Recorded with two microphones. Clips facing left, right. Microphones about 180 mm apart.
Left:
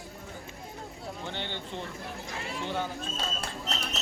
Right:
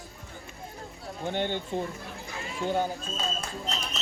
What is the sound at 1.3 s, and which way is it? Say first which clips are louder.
Speech: right 11 dB; 50° right (ahead or behind).